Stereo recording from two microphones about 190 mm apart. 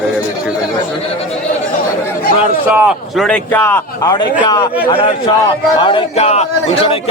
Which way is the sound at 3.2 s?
5° left (ahead or behind).